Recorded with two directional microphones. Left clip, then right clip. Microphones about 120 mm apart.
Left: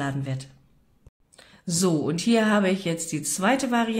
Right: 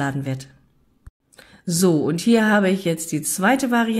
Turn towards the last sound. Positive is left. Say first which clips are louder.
# right 4 dB
turn(degrees=-30)  # may be behind; listen again after turning